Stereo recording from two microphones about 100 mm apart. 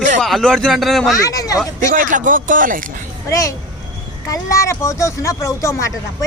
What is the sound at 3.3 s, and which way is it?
Speech, 35° left (ahead or behind).